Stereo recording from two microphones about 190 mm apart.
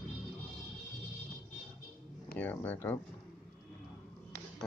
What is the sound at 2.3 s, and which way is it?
Speech, 10° left (ahead or behind).